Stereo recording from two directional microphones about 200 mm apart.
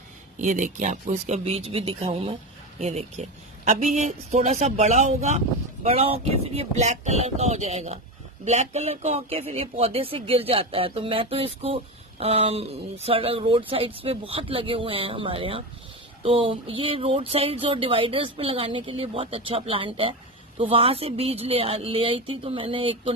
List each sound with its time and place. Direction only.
0.4 s speech: 40° right (ahead or behind)